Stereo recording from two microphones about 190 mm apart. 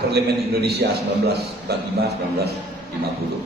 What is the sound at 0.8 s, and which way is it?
A man's voice, 55° right (ahead or behind).